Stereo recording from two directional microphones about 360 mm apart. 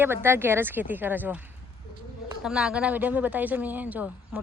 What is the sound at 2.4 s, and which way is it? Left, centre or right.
A woman's voice, centre.